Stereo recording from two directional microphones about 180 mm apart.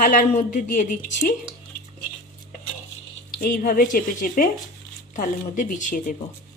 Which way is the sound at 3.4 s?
50° left (ahead or behind).